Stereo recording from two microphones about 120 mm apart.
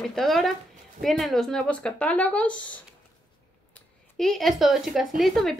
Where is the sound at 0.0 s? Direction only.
5° left (ahead or behind).